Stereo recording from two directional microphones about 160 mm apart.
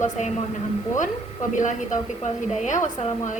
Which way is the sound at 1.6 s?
50° left (ahead or behind).